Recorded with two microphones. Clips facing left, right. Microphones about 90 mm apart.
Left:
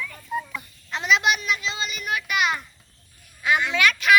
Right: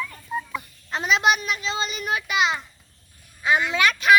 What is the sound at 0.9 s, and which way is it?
A child's voice, 40° right (ahead or behind).